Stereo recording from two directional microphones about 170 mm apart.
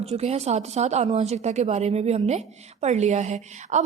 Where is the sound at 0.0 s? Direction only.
40° right (ahead or behind).